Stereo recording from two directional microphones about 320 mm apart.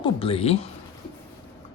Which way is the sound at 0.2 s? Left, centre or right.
Centre.